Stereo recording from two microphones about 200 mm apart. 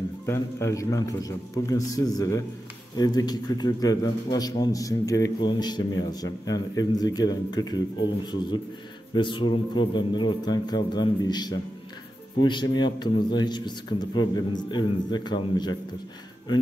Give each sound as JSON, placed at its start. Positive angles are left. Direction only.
{"t": 0.3, "sound": "a man's voice", "side_deg": 15}
{"t": 9.1, "sound": "a man's voice", "side_deg": 25}